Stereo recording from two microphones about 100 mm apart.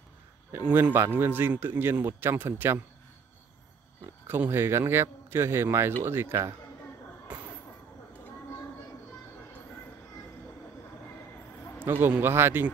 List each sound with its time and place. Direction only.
0.6 s speech: 15° right (ahead or behind)
4.0 s speech: 25° right (ahead or behind)
11.8 s speech: 20° right (ahead or behind)